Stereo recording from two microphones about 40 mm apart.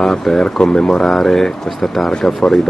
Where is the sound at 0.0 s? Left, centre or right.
Centre.